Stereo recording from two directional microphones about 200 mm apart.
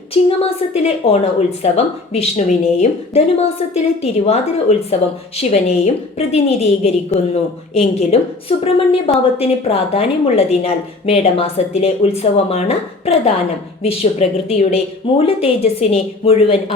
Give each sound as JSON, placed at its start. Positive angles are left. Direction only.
{"t": 0.1, "sound": "a woman's voice", "side_deg": 30}